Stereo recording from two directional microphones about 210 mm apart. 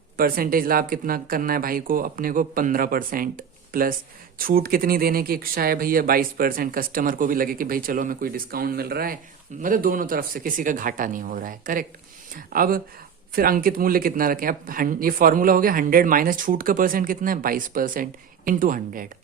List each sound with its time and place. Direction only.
0.2 s speech: 45° right (ahead or behind)